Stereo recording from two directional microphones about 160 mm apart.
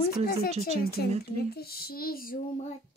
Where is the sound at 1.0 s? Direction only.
75° left (ahead or behind).